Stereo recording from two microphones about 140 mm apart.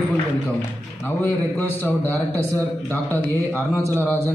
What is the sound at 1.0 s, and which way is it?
A man's voice, 15° left (ahead or behind).